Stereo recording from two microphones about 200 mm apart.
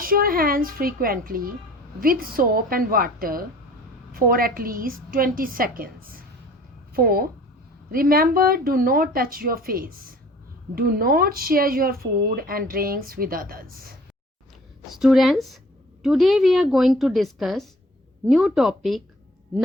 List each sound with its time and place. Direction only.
0.0 s speech: 45° right (ahead or behind)
14.8 s a woman's voice: centre (ahead or behind)